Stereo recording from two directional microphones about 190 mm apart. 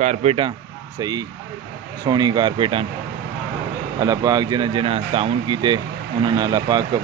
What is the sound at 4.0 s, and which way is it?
Speech, 20° right (ahead or behind).